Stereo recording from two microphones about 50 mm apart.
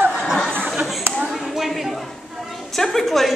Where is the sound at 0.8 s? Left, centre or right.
Centre.